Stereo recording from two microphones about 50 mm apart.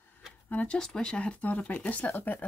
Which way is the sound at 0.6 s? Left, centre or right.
Centre.